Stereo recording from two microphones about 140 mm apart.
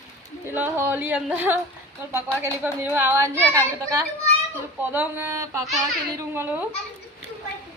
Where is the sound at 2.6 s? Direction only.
10° right (ahead or behind).